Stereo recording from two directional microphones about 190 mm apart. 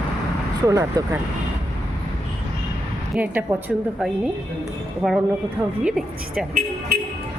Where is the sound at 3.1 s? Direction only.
10° right (ahead or behind).